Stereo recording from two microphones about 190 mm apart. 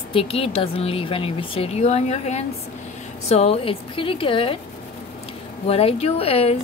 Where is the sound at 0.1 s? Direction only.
30° left (ahead or behind).